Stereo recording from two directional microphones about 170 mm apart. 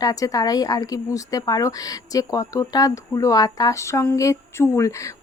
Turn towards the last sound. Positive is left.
turn(degrees=20)  # may be behind; listen again after turning